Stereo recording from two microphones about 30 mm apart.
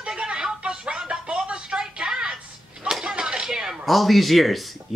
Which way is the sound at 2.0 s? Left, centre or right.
Right.